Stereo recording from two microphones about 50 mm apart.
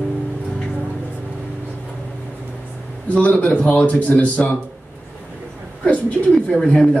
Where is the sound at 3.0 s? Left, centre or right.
Left.